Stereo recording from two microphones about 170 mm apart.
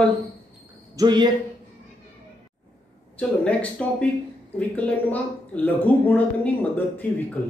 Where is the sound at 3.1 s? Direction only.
10° left (ahead or behind).